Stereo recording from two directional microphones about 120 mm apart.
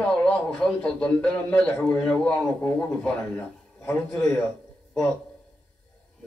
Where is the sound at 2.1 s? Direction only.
15° left (ahead or behind).